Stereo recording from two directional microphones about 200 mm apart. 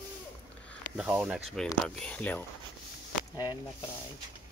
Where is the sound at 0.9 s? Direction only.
5° right (ahead or behind).